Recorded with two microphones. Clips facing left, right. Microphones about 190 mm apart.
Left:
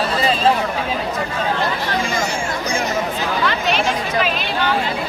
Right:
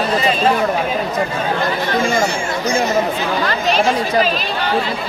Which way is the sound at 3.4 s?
40° right (ahead or behind).